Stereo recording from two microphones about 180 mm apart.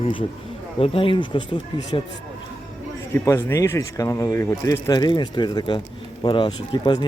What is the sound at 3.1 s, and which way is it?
Speech, 15° left (ahead or behind).